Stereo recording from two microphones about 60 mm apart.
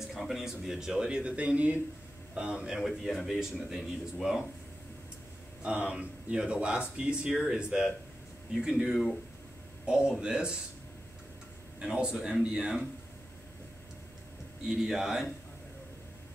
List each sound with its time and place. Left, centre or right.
0.1 s speech: centre
2.9 s speech: centre
5.6 s speech: centre
11.8 s speech: centre
14.7 s speech: centre